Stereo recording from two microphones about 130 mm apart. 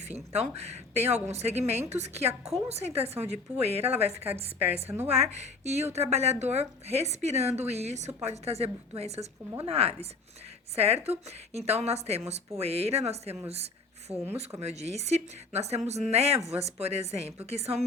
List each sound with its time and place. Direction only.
0.0 s a woman's voice: 55° right (ahead or behind)
4.6 s a woman's voice: 15° right (ahead or behind)
5.1 s a woman's voice: 55° right (ahead or behind)
14.6 s a woman's voice: 55° right (ahead or behind)